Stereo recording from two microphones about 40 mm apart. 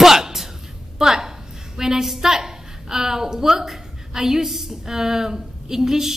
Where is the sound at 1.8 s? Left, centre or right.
Centre.